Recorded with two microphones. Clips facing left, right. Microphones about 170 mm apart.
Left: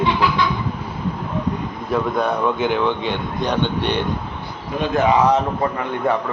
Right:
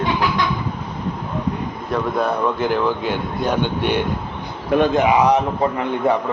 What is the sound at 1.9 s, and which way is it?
A man's voice, centre (ahead or behind).